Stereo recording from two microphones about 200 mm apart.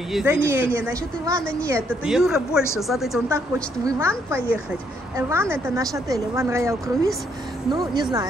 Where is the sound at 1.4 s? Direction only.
5° left (ahead or behind).